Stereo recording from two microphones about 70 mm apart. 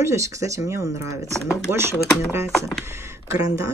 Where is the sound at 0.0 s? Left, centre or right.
Right.